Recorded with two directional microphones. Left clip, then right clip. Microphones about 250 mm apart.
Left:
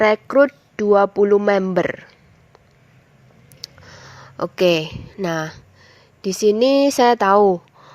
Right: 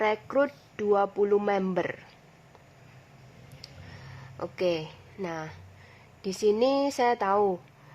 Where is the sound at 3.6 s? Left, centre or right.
Left.